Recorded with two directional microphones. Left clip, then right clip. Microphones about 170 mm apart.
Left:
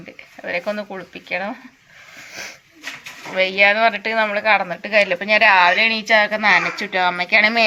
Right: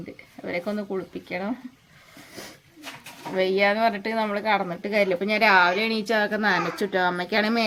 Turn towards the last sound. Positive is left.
turn(degrees=-20)  # may be behind; listen again after turning